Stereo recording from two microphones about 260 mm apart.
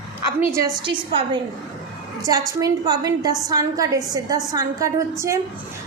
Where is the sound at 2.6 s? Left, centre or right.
Centre.